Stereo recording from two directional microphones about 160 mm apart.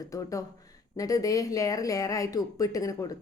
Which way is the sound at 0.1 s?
20° left (ahead or behind).